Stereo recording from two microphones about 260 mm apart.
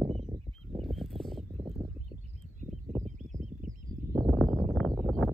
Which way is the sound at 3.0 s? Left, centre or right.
Right.